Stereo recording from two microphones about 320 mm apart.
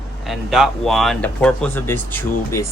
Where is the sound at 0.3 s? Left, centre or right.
Centre.